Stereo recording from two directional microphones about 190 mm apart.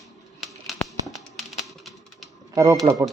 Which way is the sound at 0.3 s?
Centre (ahead or behind).